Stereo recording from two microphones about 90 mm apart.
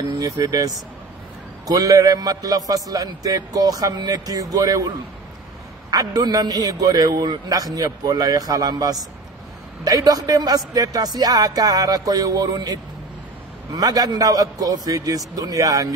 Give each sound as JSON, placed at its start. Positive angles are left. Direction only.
{"t": 0.0, "sound": "a man's voice", "side_deg": -50}